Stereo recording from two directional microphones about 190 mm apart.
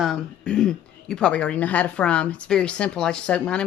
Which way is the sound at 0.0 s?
5° left (ahead or behind).